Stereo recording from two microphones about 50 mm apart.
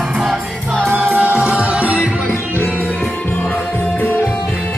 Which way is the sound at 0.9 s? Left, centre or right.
Right.